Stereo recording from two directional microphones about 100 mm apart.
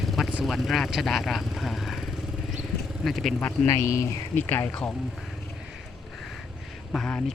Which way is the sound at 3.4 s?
30° left (ahead or behind).